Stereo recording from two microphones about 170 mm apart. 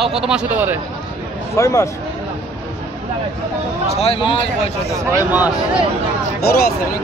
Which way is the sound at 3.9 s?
35° left (ahead or behind).